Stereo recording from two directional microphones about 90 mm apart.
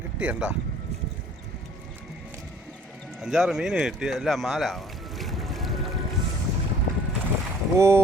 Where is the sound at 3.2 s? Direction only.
5° right (ahead or behind).